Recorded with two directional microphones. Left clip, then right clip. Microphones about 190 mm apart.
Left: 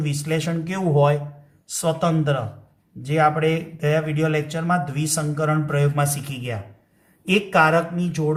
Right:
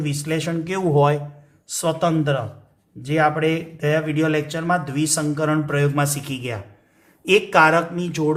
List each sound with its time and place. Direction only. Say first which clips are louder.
0.0 s speech: right 1 dB; 25° right (ahead or behind)